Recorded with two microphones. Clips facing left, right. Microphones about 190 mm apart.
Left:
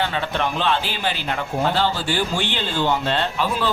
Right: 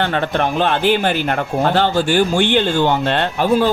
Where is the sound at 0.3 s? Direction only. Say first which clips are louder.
Right 4 dB; 50° right (ahead or behind).